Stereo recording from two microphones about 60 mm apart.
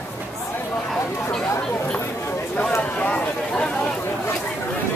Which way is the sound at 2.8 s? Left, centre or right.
Left.